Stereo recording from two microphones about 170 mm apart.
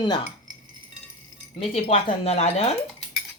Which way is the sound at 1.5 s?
35° left (ahead or behind).